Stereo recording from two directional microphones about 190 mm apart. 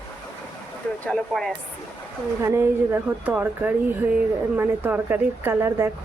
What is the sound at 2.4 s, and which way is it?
Speech, 10° right (ahead or behind).